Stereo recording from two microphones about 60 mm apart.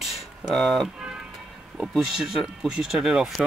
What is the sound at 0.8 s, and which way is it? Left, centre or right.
Music, centre.